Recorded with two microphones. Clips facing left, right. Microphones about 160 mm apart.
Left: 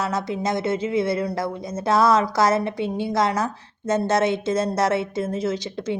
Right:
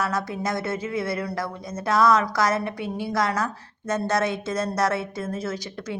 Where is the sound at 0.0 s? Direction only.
20° left (ahead or behind).